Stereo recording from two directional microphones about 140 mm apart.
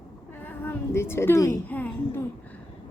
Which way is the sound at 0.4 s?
15° left (ahead or behind).